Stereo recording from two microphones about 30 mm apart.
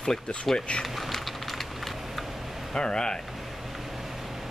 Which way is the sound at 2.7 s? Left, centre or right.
Left.